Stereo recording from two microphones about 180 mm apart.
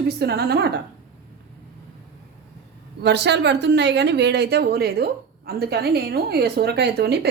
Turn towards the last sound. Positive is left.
turn(degrees=-65)  # may be behind; listen again after turning